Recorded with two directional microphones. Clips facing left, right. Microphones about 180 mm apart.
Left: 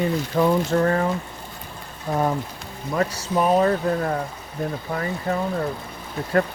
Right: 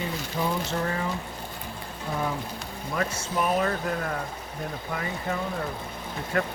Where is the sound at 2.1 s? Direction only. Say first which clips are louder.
Left 7 dB; 45° left (ahead or behind).